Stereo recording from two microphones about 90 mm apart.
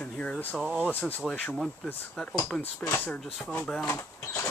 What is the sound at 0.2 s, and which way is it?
Speech, 15° left (ahead or behind).